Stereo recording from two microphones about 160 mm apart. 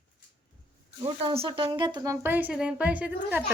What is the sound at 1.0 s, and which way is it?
Speech, 35° right (ahead or behind).